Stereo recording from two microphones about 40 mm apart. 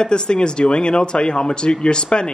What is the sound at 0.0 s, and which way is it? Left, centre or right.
Speech, left.